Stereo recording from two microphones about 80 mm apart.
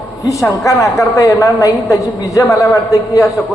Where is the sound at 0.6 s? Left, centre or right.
Left.